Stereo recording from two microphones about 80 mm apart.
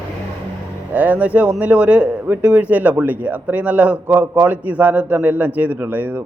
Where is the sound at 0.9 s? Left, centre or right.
Right.